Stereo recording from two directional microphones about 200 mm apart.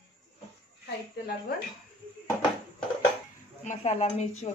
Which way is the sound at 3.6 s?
35° left (ahead or behind).